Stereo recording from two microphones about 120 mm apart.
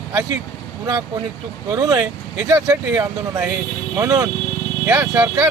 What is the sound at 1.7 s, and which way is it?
Speech, 30° right (ahead or behind).